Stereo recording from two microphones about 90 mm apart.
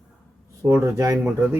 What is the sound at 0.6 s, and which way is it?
Speech, 30° right (ahead or behind).